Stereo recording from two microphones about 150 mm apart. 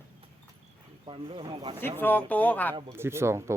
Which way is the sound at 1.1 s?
35° right (ahead or behind).